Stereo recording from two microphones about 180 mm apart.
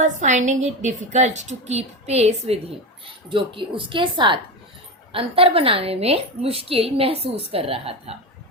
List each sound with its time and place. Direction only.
0.0 s a woman's voice: 45° right (ahead or behind)